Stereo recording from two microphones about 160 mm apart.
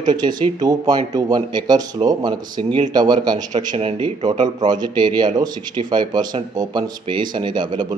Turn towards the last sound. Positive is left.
turn(degrees=-30)  # may be behind; listen again after turning